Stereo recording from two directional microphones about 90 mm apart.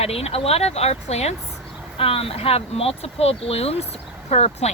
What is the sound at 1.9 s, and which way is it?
Speech, 90° left.